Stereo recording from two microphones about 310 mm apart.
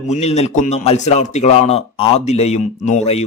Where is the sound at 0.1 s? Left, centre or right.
Left.